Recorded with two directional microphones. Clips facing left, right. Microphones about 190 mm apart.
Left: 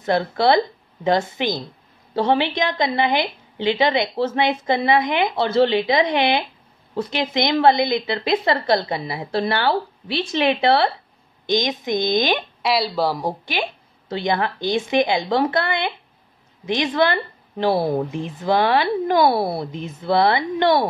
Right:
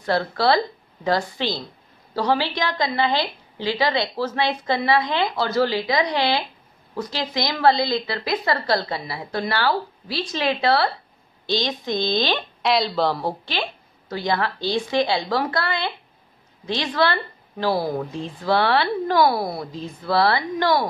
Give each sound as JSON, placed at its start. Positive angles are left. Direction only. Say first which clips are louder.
{"t": 0.0, "sound": "a woman's voice", "louder": "left 2 dB", "side_deg": 20}
{"t": 12.6, "sound": "a woman's voice", "louder": "even", "side_deg": 5}